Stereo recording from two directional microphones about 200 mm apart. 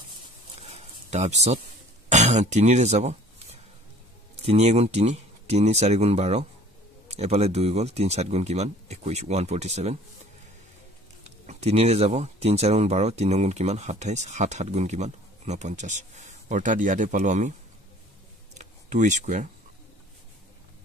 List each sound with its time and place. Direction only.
0.6 s a sound: 35° right (ahead or behind)
2.0 s speech: 35° right (ahead or behind)
4.5 s speech: 35° right (ahead or behind)
11.2 s speech: 30° right (ahead or behind)
18.6 s speech: 35° right (ahead or behind)